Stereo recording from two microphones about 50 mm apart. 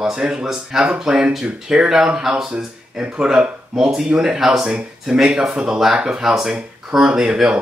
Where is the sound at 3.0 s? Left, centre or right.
Right.